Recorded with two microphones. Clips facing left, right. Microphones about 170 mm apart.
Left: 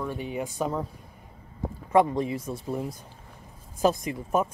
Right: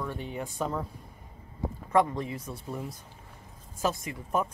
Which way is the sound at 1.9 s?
15° left (ahead or behind).